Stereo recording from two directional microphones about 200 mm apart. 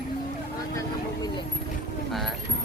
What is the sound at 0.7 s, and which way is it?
Vehicle, 20° left (ahead or behind).